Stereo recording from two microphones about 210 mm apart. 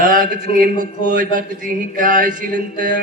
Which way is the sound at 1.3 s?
40° right (ahead or behind).